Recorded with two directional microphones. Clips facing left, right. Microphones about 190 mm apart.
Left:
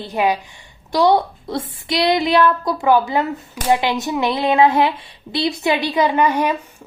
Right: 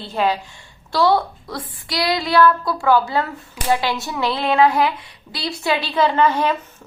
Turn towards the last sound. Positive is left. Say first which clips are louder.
# even
turn(degrees=15)  # may be behind; listen again after turning